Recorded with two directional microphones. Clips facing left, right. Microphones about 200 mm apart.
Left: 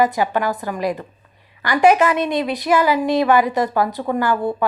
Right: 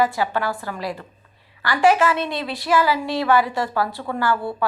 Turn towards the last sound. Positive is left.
turn(degrees=20)  # may be behind; listen again after turning